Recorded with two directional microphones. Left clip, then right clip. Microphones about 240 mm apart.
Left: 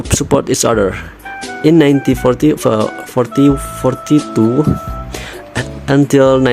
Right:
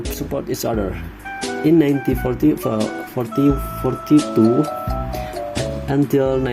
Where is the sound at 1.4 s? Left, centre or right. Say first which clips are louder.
Right 1 dB; centre.